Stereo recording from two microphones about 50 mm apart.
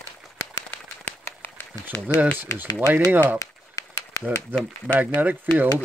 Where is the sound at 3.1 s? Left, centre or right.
Right.